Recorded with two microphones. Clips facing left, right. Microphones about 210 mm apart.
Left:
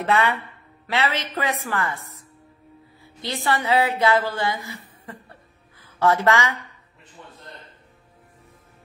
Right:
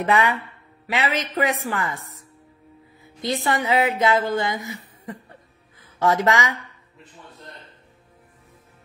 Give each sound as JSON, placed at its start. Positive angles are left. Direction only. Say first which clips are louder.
{"t": 0.0, "sound": "a man's voice", "louder": "right 1 dB", "side_deg": -15}
{"t": 3.4, "sound": "a woman's voice", "louder": "left 1 dB", "side_deg": -20}
{"t": 5.8, "sound": "speech", "louder": "even", "side_deg": -15}